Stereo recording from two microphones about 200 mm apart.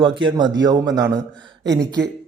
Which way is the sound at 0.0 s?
25° right (ahead or behind).